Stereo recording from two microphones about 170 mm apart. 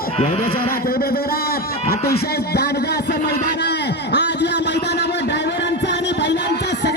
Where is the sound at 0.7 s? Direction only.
60° left (ahead or behind).